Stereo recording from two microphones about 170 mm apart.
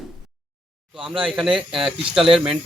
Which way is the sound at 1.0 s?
5° right (ahead or behind).